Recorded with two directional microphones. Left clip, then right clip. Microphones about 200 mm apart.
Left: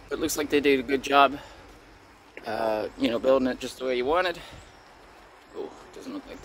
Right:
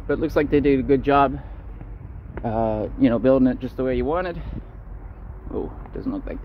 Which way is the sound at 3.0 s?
Centre (ahead or behind).